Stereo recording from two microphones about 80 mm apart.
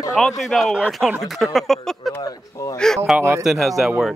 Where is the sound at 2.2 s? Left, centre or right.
Left.